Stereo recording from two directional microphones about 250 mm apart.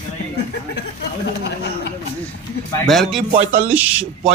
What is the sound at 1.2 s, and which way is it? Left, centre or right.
Speech, left.